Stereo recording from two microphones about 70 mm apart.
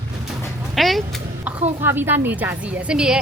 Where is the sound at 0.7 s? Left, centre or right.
Centre.